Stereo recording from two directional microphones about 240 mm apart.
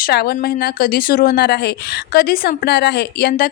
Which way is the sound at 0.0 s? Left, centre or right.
Left.